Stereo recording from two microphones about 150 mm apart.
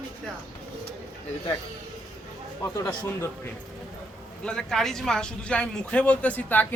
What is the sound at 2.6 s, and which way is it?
Speech, 20° left (ahead or behind).